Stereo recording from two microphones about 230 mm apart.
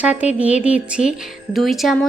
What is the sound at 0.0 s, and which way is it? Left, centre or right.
A woman's voice, centre.